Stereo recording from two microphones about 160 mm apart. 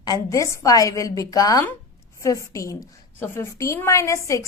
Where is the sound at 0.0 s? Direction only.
20° left (ahead or behind).